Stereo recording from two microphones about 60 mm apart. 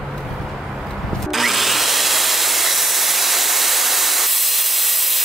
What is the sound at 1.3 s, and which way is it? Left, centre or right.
Tools, centre.